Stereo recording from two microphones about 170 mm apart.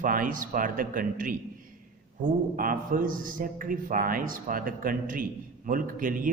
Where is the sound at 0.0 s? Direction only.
55° right (ahead or behind).